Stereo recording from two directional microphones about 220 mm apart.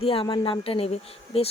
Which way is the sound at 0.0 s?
25° left (ahead or behind).